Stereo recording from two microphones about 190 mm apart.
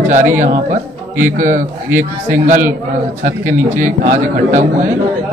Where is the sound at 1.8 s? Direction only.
10° right (ahead or behind).